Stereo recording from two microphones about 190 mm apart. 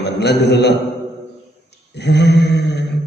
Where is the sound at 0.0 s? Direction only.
60° left (ahead or behind).